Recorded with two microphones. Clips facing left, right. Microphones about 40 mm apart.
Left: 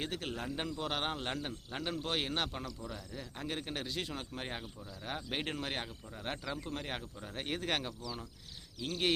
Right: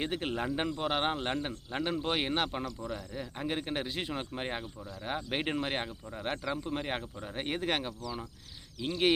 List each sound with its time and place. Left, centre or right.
0.0 s speech: right
2.6 s speech: centre